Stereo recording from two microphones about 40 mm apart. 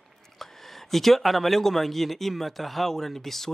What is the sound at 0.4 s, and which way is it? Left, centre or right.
Speech, centre.